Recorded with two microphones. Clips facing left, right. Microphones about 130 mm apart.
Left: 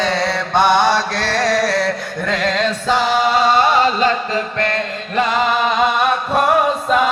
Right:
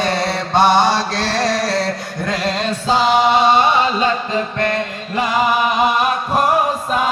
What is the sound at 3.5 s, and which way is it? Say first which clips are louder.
Music: even; 20° right (ahead or behind).